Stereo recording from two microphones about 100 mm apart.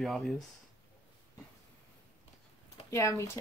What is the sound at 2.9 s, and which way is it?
Speech, 30° left (ahead or behind).